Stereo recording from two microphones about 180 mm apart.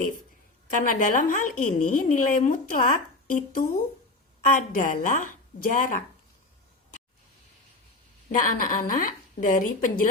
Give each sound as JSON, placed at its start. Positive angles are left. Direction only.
{"t": 0.7, "sound": "a woman's voice", "side_deg": 45}
{"t": 8.3, "sound": "a woman's voice", "side_deg": 45}